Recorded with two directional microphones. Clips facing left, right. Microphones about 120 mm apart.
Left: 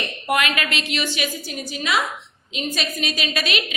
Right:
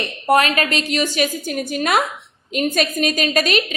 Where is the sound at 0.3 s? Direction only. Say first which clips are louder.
Right 6 dB; 35° right (ahead or behind).